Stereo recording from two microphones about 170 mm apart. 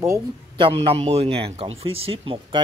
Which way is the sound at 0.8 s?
40° right (ahead or behind).